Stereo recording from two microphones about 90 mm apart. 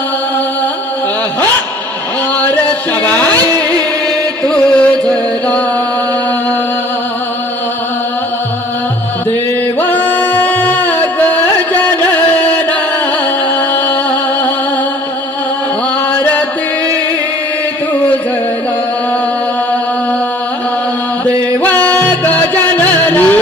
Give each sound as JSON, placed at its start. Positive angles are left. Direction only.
{"t": 2.4, "sound": "music", "side_deg": 20}
{"t": 9.8, "sound": "music", "side_deg": 20}
{"t": 16.1, "sound": "music", "side_deg": 20}
{"t": 21.2, "sound": "music", "side_deg": -40}
{"t": 21.6, "sound": "music", "side_deg": 20}